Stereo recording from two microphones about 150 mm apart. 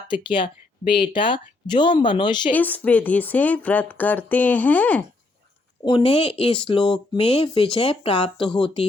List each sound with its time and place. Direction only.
0.2 s speech: 35° left (ahead or behind)
2.5 s speech: 10° left (ahead or behind)
5.8 s speech: 35° left (ahead or behind)